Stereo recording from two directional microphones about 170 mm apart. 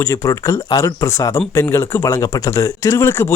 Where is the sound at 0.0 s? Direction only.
20° left (ahead or behind).